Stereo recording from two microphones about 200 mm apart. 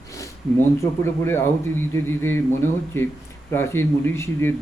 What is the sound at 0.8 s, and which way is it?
Speech, 15° left (ahead or behind).